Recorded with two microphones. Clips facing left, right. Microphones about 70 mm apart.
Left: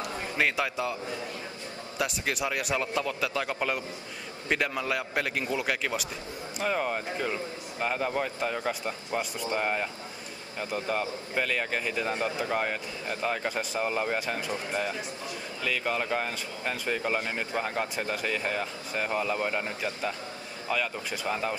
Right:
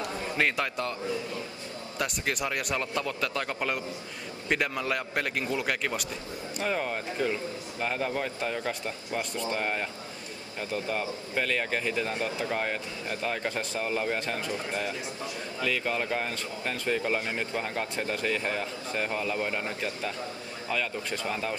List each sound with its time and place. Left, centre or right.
0.4 s a man's voice: centre
2.0 s a man's voice: centre
8.8 s a man's voice: centre
10.9 s a man's voice: centre
11.9 s a man's voice: centre
15.6 s a man's voice: centre